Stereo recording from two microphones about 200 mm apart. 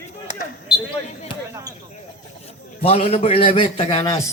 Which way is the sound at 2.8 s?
30° left (ahead or behind).